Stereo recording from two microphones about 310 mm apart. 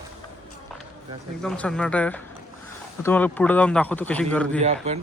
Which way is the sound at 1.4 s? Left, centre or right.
Centre.